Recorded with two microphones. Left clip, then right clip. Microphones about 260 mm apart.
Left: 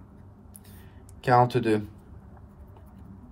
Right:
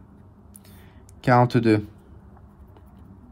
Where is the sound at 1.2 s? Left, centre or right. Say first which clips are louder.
Right 2 dB; right.